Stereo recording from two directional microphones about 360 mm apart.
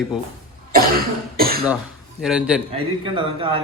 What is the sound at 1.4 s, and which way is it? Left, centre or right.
Cough, right.